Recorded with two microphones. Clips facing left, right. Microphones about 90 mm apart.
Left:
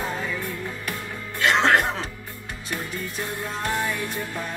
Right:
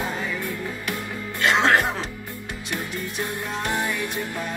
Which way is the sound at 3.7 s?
15° right (ahead or behind).